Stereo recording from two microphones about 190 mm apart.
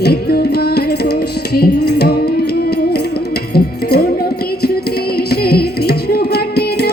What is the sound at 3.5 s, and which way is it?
Music, 55° left (ahead or behind).